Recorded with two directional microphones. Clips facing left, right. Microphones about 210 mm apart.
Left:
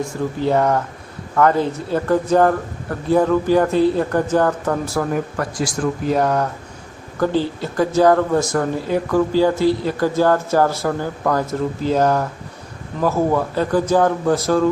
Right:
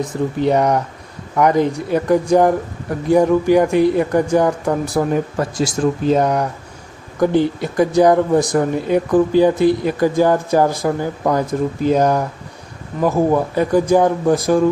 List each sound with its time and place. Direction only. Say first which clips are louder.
0.0 s speech: right 3 dB; 20° right (ahead or behind)